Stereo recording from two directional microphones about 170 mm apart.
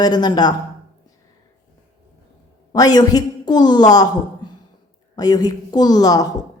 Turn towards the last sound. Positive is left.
turn(degrees=20)  # may be behind; listen again after turning